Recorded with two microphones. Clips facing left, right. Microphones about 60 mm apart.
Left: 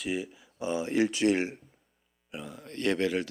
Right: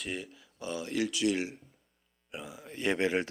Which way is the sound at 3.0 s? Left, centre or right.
Right.